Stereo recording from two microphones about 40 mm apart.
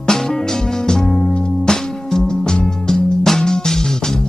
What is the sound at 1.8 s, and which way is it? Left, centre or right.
Music, centre.